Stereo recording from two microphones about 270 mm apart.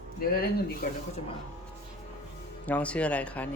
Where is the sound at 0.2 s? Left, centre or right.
Left.